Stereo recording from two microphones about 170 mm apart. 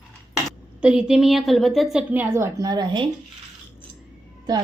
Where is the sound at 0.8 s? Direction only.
5° right (ahead or behind); by 3.1 s 25° right (ahead or behind).